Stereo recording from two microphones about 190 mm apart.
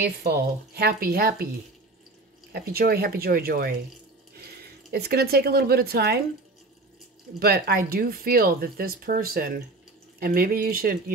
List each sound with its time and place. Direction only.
0.0 s a woman's voice: 55° right (ahead or behind)
2.5 s speech: 55° right (ahead or behind)
4.9 s a woman's voice: 55° right (ahead or behind)
7.3 s speech: 55° right (ahead or behind)